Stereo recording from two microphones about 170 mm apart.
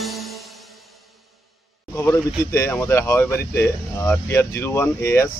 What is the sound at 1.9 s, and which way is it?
Speech, 15° left (ahead or behind).